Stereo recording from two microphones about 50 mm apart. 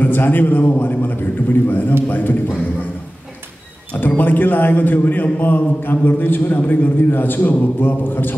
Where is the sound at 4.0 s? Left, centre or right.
Left.